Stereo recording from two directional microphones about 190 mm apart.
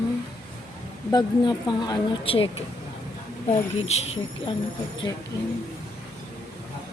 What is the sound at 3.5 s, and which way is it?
Speech, 35° left (ahead or behind).